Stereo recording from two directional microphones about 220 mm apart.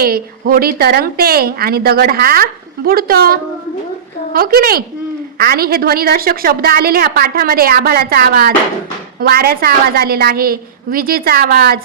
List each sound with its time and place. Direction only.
0.0 s a woman's voice: 40° right (ahead or behind)